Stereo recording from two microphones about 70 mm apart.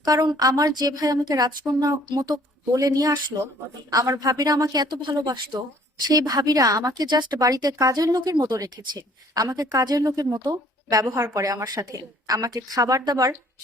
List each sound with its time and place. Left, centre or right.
0.0 s a woman's voice: right
6.1 s a woman's voice: right
8.5 s a woman's voice: right
11.2 s a woman's voice: right